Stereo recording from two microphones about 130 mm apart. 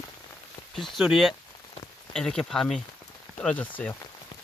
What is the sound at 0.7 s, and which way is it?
Speech, centre (ahead or behind).